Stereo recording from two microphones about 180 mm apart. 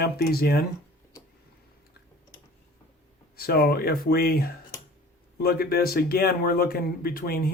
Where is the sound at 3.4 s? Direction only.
55° left (ahead or behind).